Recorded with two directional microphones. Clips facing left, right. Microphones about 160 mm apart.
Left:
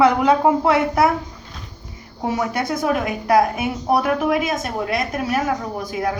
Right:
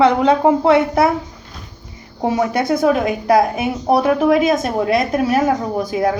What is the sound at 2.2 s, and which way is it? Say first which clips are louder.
A woman's voice: right 5 dB; 25° right (ahead or behind).